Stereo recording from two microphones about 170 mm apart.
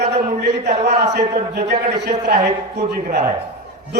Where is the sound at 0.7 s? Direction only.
40° right (ahead or behind).